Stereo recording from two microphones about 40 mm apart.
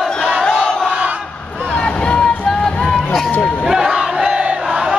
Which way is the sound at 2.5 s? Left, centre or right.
Centre.